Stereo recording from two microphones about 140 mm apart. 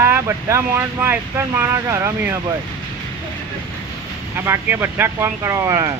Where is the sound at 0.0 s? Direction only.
15° right (ahead or behind).